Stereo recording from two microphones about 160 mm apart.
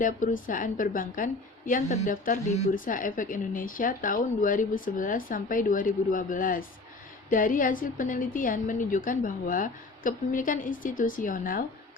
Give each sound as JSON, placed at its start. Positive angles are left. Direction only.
{"t": 0.0, "sound": "a woman's voice", "side_deg": 55}